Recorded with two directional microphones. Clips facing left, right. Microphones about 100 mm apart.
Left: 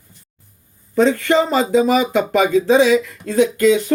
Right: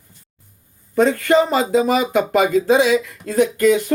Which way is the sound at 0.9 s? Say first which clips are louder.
Even; 40° right (ahead or behind).